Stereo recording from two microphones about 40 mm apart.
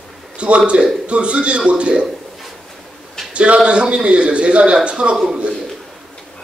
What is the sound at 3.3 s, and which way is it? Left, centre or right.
A man's voice, right.